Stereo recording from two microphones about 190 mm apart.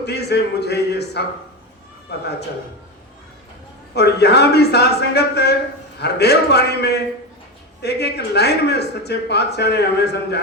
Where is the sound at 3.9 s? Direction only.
60° left (ahead or behind).